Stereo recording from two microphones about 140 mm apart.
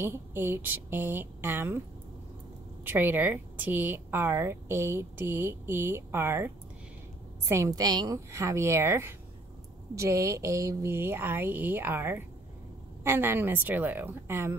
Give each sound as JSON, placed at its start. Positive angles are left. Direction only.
{"t": 0.0, "sound": "speech", "side_deg": -15}
{"t": 2.8, "sound": "a woman's voice", "side_deg": -15}